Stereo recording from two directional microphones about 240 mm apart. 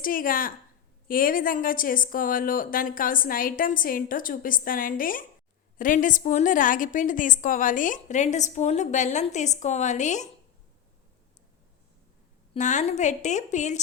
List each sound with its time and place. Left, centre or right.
0.0 s a woman's voice: left
12.5 s a woman's voice: left